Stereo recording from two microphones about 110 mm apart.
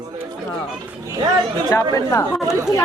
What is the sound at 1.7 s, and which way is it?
Speech, 30° left (ahead or behind).